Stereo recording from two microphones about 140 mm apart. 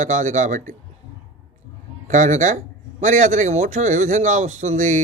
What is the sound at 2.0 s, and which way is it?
A man's voice, 60° right (ahead or behind).